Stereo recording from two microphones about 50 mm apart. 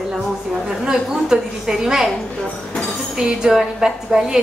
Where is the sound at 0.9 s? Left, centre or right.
Centre.